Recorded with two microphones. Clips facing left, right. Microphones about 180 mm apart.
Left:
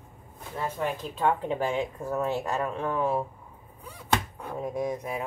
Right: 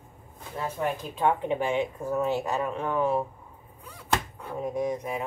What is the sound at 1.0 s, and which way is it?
Speech, 15° right (ahead or behind).